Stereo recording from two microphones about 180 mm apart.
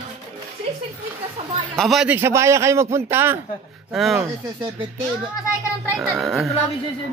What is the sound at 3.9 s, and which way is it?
Speech, centre (ahead or behind).